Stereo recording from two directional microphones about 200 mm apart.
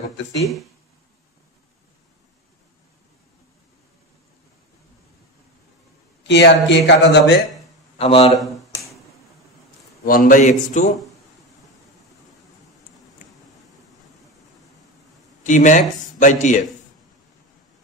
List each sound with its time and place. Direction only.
6.2 s speech: 60° left (ahead or behind)
8.0 s a man's voice: 30° left (ahead or behind)
8.4 s a sound: centre (ahead or behind)
10.0 s speech: 45° left (ahead or behind)
15.4 s speech: 40° left (ahead or behind)